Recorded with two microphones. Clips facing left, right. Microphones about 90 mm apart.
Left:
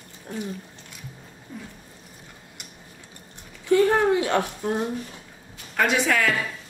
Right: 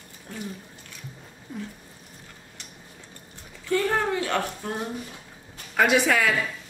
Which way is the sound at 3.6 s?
20° left (ahead or behind).